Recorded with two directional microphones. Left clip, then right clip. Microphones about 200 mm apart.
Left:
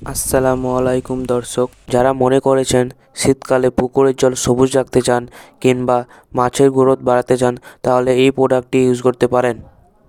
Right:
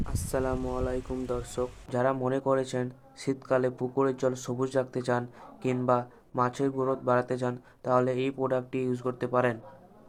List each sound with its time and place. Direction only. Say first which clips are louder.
0.0 s speech: left 15 dB; 50° left (ahead or behind)